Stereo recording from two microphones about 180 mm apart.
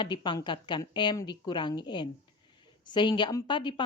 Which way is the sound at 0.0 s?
25° left (ahead or behind).